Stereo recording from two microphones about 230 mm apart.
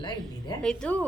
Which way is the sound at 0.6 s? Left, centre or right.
Centre.